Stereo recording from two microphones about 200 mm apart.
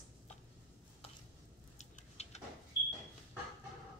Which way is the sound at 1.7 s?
35° left (ahead or behind).